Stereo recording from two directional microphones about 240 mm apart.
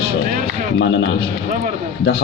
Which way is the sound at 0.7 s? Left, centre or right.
Left.